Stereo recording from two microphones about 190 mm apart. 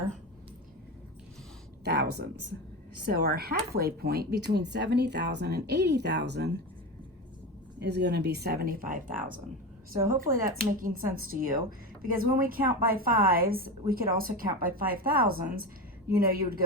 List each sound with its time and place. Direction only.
1.8 s speech: 60° right (ahead or behind)
7.8 s a woman's voice: 60° right (ahead or behind)